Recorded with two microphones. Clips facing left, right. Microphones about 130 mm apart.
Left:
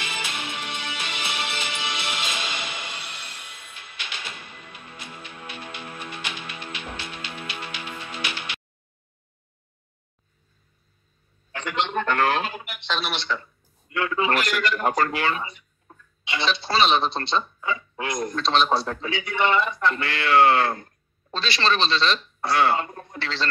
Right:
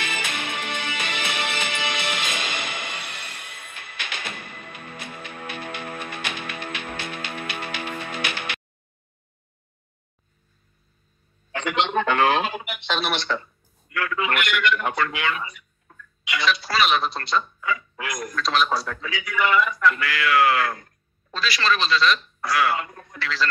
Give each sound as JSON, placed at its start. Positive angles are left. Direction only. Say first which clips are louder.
{"t": 0.0, "sound": "music", "louder": "right 2 dB", "side_deg": -55}
{"t": 11.5, "sound": "a sound", "louder": "right 3 dB", "side_deg": -70}
{"t": 12.1, "sound": "speech", "louder": "right 2 dB", "side_deg": -15}
{"t": 12.4, "sound": "a sound", "louder": "right 3 dB", "side_deg": -90}
{"t": 13.0, "sound": "speech", "louder": "right 3 dB", "side_deg": -45}
{"t": 13.8, "sound": "a man's voice", "louder": "left 2 dB", "side_deg": 25}